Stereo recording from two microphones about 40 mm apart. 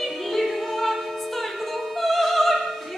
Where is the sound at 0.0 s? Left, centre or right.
Centre.